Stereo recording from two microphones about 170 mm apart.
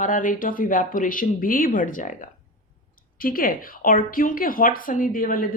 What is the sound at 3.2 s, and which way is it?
Speech, 55° left (ahead or behind).